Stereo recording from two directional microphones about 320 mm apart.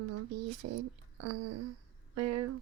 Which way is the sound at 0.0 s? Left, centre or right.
Right.